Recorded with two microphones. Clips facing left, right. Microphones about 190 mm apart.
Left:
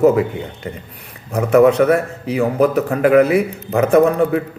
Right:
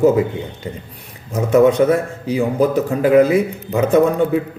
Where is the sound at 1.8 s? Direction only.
30° right (ahead or behind).